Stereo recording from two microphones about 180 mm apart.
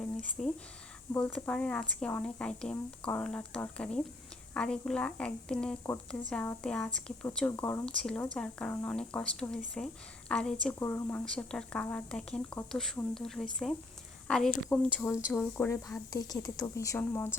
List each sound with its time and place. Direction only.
0.4 s speech: centre (ahead or behind)